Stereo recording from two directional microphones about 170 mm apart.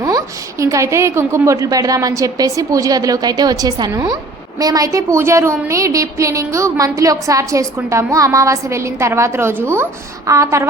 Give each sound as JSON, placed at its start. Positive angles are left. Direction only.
{"t": 0.0, "sound": "a woman's voice", "side_deg": -20}